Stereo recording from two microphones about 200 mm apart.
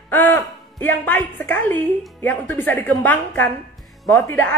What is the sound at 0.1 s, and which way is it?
A woman's voice, 10° left (ahead or behind).